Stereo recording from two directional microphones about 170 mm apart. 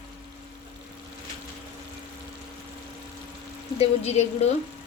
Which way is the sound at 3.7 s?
40° left (ahead or behind).